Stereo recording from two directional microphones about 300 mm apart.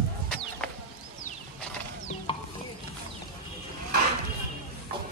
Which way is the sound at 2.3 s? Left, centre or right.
Centre.